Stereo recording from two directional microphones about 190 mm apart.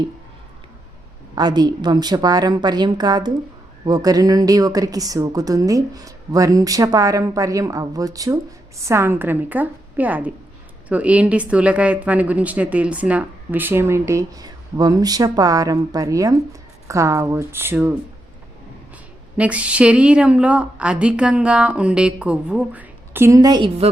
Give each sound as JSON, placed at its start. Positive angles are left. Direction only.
{"t": 1.4, "sound": "a woman's voice", "side_deg": -20}
{"t": 19.4, "sound": "speech", "side_deg": -5}